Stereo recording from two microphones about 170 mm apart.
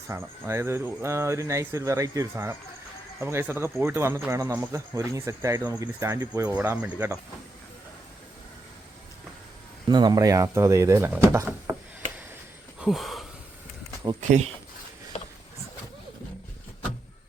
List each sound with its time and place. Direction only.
0.1 s speech: 15° right (ahead or behind)
9.9 s speech: 25° right (ahead or behind)
12.8 s a sound: centre (ahead or behind)
14.2 s speech: 40° right (ahead or behind)